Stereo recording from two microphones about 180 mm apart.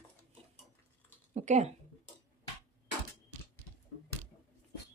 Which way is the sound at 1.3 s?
40° right (ahead or behind).